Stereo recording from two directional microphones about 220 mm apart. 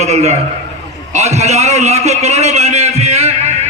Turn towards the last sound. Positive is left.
turn(degrees=-30)  # may be behind; listen again after turning